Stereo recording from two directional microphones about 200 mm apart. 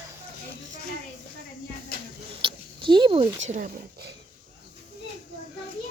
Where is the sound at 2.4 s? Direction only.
25° right (ahead or behind).